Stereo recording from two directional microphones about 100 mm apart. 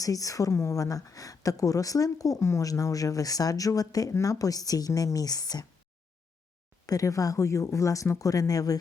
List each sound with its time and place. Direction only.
0.0 s speech: 35° left (ahead or behind)
6.8 s speech: 35° left (ahead or behind)